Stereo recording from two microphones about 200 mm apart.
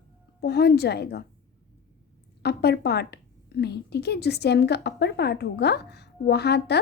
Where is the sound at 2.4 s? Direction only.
55° left (ahead or behind).